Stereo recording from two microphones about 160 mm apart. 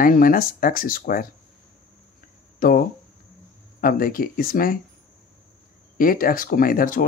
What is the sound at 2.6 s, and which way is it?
Speech, 65° left (ahead or behind).